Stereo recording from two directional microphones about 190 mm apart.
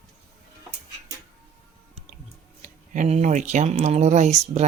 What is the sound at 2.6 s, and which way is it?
Speech, 45° right (ahead or behind).